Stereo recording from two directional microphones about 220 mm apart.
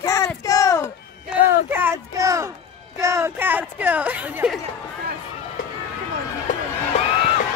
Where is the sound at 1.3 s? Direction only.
10° right (ahead or behind).